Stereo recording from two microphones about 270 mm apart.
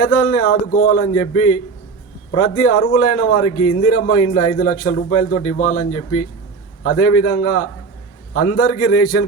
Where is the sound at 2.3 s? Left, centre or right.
Left.